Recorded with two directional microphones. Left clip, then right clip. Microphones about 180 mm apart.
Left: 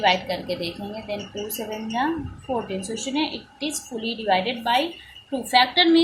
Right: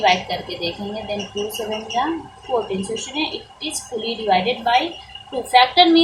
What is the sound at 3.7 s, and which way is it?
A woman's voice, 45° left (ahead or behind).